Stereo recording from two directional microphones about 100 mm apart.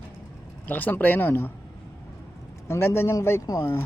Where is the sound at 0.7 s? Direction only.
15° left (ahead or behind).